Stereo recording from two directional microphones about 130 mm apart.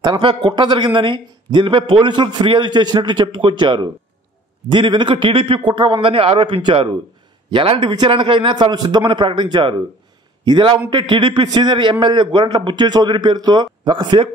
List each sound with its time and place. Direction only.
0.0 s a man's voice: 35° right (ahead or behind)